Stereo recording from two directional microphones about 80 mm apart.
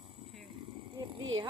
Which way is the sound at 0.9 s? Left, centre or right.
Right.